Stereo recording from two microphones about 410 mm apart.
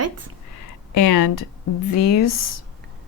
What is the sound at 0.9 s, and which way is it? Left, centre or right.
A woman's voice, left.